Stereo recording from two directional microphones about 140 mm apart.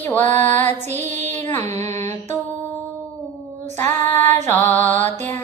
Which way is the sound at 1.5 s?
55° right (ahead or behind).